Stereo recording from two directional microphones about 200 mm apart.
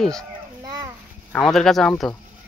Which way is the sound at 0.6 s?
20° right (ahead or behind).